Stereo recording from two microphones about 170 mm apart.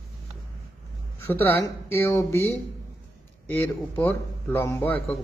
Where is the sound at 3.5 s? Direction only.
10° left (ahead or behind).